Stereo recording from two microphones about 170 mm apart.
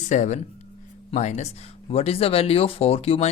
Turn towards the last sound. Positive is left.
turn(degrees=35)  # may be behind; listen again after turning